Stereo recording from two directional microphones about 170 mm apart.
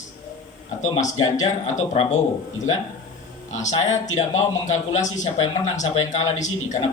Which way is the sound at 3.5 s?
45° left (ahead or behind).